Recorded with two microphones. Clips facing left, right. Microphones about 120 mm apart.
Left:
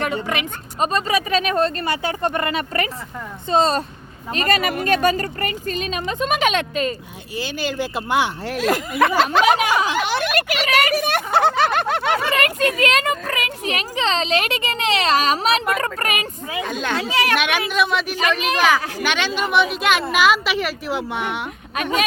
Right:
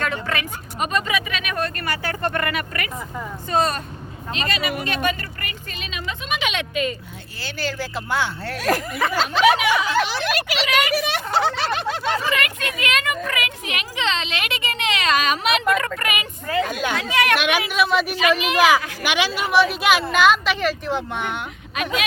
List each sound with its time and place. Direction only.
0.0 s speech: 20° left (ahead or behind)
0.8 s speech: 35° left (ahead or behind)
4.3 s speech: 45° left (ahead or behind)
7.3 s speech: 15° left (ahead or behind)
9.0 s speech: 60° left (ahead or behind)
12.3 s speech: 40° left (ahead or behind)
17.3 s a woman's voice: centre (ahead or behind)